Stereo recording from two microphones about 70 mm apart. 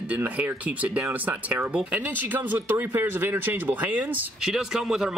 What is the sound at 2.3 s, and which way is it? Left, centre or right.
Speech, right.